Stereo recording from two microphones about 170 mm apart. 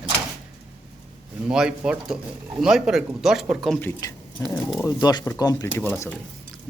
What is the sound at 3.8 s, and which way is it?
Speech, 10° left (ahead or behind).